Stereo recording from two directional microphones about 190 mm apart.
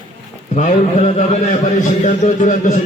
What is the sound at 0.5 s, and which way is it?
Speech, 35° left (ahead or behind).